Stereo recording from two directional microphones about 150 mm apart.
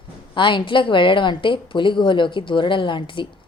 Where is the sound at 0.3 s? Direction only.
35° left (ahead or behind).